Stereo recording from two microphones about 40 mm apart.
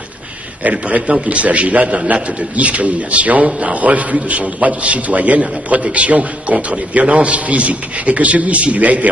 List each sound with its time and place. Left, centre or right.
0.7 s a man's voice: right